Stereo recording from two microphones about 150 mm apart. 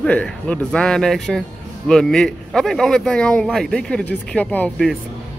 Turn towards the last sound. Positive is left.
turn(degrees=5)  # may be behind; listen again after turning